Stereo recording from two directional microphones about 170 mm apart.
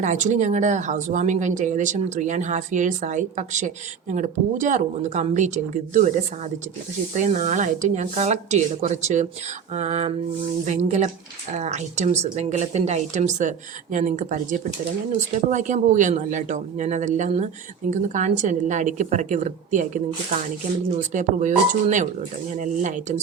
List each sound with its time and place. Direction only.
0.0 s speech: 45° right (ahead or behind)